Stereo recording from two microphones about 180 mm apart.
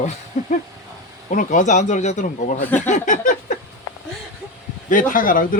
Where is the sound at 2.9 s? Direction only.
45° left (ahead or behind).